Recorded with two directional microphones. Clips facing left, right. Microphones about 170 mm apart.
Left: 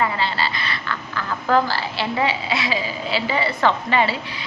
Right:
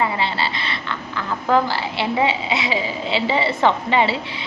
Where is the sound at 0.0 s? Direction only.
20° right (ahead or behind).